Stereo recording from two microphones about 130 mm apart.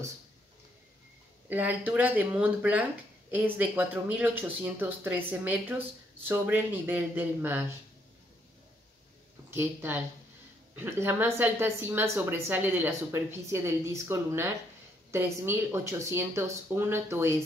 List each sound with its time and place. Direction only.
1.5 s speech: 15° right (ahead or behind)
9.5 s speech: 20° right (ahead or behind)